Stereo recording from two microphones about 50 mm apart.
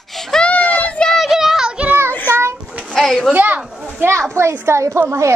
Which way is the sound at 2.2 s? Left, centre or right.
Right.